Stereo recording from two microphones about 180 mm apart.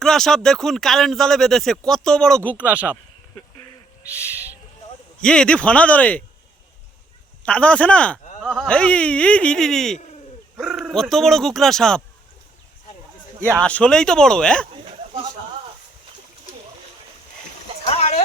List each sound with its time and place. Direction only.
0.0 s speech: centre (ahead or behind)
2.6 s speech: 10° right (ahead or behind)
4.0 s owl: 15° left (ahead or behind)
5.2 s speech: 5° left (ahead or behind)
7.4 s speech: 5° left (ahead or behind)
13.5 s speech: 5° left (ahead or behind)
17.8 s a sound: 35° left (ahead or behind)